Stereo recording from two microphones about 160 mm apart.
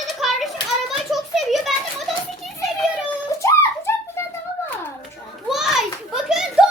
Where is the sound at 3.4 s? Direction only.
15° left (ahead or behind).